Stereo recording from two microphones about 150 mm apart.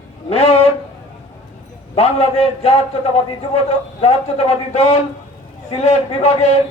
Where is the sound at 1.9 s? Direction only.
45° left (ahead or behind).